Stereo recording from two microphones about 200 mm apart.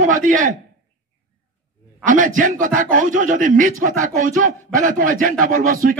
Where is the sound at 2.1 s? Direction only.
40° right (ahead or behind).